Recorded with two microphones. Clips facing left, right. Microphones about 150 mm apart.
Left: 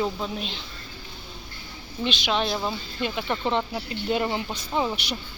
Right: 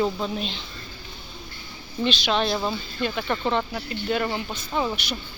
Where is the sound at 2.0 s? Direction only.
10° left (ahead or behind).